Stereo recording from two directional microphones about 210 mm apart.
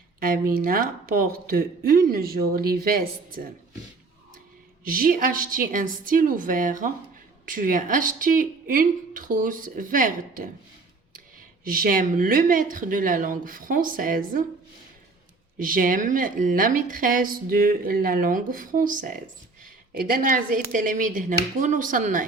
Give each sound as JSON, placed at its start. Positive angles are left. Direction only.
{"t": 0.2, "sound": "speech", "side_deg": -45}
{"t": 4.9, "sound": "a woman's voice", "side_deg": -40}
{"t": 11.6, "sound": "a woman's voice", "side_deg": -40}
{"t": 15.5, "sound": "a woman's voice", "side_deg": -40}